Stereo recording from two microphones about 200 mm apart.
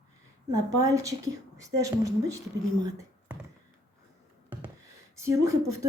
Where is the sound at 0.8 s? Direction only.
15° right (ahead or behind).